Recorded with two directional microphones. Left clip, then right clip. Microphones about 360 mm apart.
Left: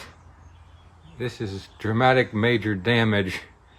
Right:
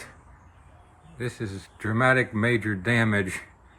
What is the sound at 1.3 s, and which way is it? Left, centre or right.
Speech, centre.